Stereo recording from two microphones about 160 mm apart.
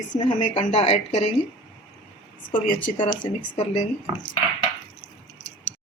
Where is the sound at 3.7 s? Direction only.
45° left (ahead or behind).